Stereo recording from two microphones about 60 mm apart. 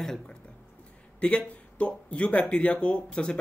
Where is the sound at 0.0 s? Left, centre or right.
Centre.